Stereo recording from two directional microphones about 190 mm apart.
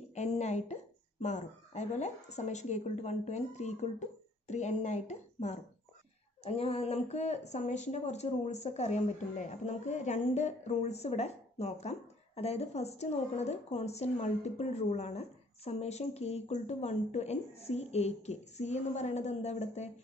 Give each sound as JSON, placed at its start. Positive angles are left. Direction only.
{"t": 0.1, "sound": "a woman's voice", "side_deg": 35}